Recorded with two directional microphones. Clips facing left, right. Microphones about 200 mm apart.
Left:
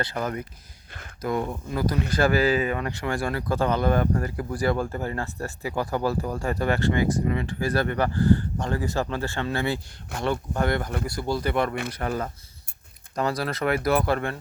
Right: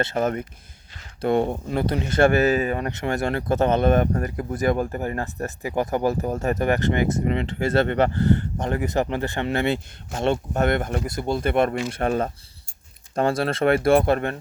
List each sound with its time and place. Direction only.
0.0 s speech: 25° right (ahead or behind)
2.5 s speech: 40° right (ahead or behind)
2.9 s speech: 20° right (ahead or behind)